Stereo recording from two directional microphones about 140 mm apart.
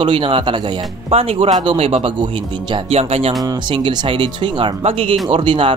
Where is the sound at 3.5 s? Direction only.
35° right (ahead or behind).